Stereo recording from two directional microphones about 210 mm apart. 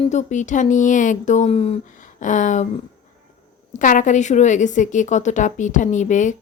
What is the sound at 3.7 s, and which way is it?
Speech, 35° left (ahead or behind).